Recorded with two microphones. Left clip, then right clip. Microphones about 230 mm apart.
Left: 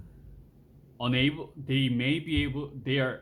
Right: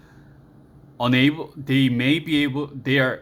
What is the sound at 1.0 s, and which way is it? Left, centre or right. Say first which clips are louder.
Speech: right 8 dB; centre.